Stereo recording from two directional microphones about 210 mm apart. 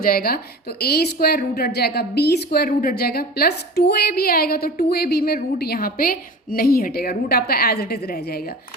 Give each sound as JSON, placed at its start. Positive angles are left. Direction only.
{"t": 0.0, "sound": "a woman's voice", "side_deg": 45}